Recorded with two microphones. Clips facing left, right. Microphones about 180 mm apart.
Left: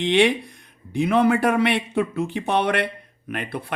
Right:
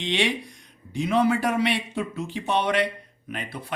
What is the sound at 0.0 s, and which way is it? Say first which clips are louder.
Speech: left 7 dB; 55° left (ahead or behind).